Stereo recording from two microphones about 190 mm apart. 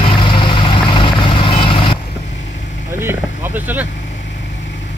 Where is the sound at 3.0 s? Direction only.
10° right (ahead or behind).